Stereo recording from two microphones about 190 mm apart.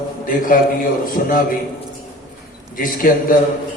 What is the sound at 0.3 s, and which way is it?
A man's voice, 45° left (ahead or behind).